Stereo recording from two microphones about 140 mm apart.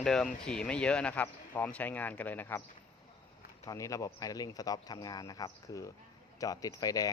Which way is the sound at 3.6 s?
25° left (ahead or behind).